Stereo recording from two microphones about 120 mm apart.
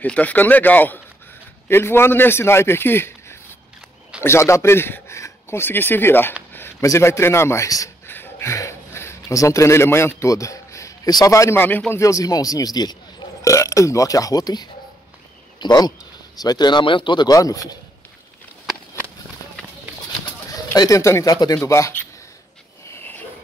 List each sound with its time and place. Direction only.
0.0 s a man's voice: 10° left (ahead or behind); by 17.7 s 30° left (ahead or behind)
20.7 s speech: 30° left (ahead or behind)
22.8 s a sound: 15° left (ahead or behind)